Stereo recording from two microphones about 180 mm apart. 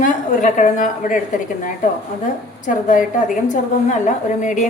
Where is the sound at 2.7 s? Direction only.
45° left (ahead or behind).